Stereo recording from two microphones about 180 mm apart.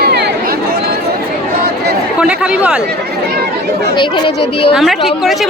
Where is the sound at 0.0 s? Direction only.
65° right (ahead or behind).